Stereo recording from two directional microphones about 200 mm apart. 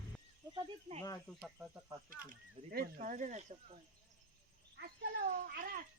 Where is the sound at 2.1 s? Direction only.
45° right (ahead or behind).